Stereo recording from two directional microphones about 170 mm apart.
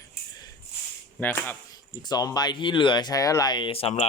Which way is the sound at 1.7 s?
25° left (ahead or behind).